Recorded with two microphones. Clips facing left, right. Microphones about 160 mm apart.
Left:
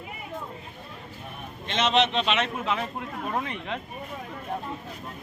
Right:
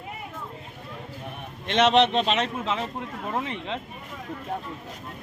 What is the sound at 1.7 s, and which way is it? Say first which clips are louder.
Speech: right 4 dB; 60° right (ahead or behind).